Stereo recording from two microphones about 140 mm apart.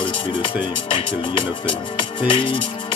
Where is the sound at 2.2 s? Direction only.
35° left (ahead or behind).